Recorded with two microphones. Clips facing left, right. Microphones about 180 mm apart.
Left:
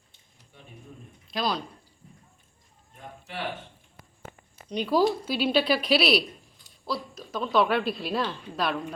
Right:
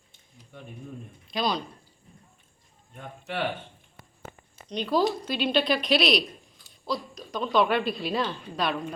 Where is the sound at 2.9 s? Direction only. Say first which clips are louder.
Right 5 dB; 60° right (ahead or behind).